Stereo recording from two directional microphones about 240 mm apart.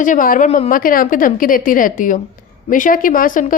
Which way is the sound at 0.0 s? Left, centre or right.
Left.